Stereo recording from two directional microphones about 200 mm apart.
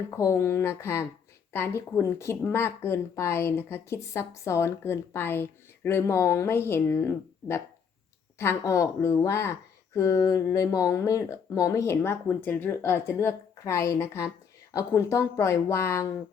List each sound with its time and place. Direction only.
0.2 s speech: 15° left (ahead or behind)